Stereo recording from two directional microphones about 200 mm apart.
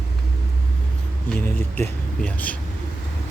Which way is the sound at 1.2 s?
5° left (ahead or behind).